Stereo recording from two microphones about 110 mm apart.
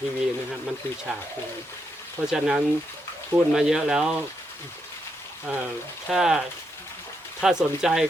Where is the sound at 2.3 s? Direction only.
5° right (ahead or behind).